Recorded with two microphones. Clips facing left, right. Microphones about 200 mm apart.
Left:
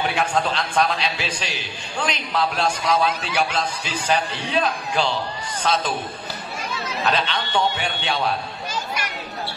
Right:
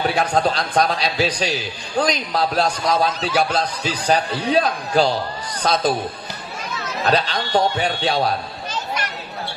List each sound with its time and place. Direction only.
0.0 s a man's voice: 40° right (ahead or behind)
7.1 s a man's voice: 40° right (ahead or behind)